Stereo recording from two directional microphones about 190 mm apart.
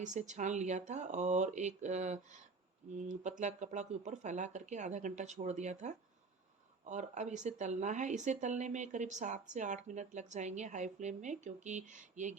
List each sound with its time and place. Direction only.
0.0 s speech: 40° right (ahead or behind)